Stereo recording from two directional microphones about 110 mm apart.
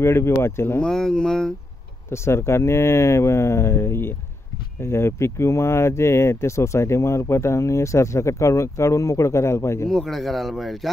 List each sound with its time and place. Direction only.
0.0 s speech: 25° left (ahead or behind)
0.7 s speech: 5° left (ahead or behind)
2.0 s speech: 25° left (ahead or behind)
9.8 s speech: 5° left (ahead or behind)